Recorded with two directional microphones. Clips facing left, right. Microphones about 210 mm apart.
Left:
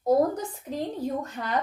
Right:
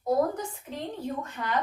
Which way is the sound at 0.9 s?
40° left (ahead or behind).